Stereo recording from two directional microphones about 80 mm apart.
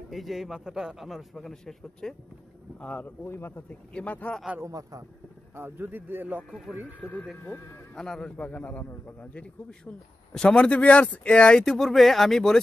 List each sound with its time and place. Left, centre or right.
0.1 s a man's voice: centre
2.8 s speech: centre
3.3 s speech: left
3.9 s speech: centre
4.6 s a man's voice: right
5.6 s a man's voice: right
7.0 s speech: centre
7.9 s a man's voice: centre